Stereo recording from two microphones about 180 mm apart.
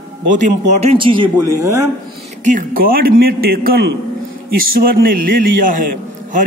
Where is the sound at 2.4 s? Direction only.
50° right (ahead or behind).